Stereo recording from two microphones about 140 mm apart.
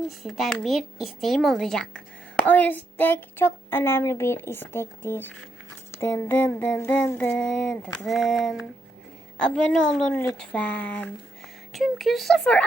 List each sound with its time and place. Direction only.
0.2 s speech: centre (ahead or behind)